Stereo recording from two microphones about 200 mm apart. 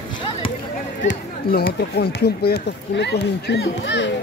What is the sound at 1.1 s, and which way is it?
Speech, 55° left (ahead or behind).